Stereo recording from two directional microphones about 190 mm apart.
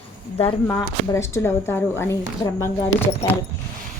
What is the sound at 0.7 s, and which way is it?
A woman's voice, 10° left (ahead or behind).